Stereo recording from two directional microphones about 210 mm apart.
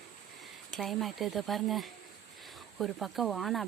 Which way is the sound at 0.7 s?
Centre (ahead or behind).